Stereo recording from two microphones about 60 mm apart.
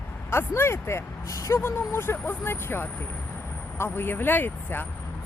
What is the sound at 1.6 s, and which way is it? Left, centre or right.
Speech, left.